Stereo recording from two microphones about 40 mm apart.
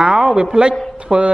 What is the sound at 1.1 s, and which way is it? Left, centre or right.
Speech, right.